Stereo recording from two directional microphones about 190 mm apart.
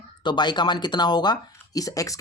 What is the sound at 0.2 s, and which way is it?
Speech, 25° left (ahead or behind).